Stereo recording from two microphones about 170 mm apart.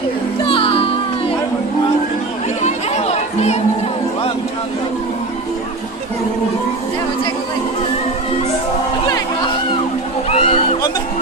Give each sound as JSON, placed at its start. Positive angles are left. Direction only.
{"t": 0.4, "sound": "music", "side_deg": 30}
{"t": 2.6, "sound": "chatter", "side_deg": 40}
{"t": 10.2, "sound": "a sound", "side_deg": 40}